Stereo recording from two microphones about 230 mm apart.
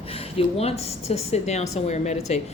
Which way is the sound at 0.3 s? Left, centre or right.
Left.